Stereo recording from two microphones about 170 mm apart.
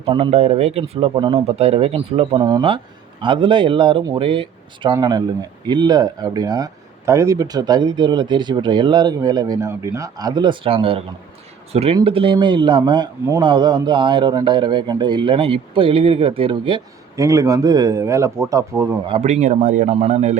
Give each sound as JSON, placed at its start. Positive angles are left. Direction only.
{"t": 0.0, "sound": "speech", "side_deg": -35}
{"t": 19.0, "sound": "a man's voice", "side_deg": -35}